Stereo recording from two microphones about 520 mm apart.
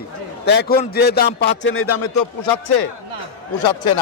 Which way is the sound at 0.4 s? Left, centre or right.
Centre.